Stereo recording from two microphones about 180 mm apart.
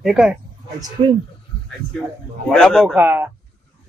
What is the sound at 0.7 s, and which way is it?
Speech, 20° right (ahead or behind).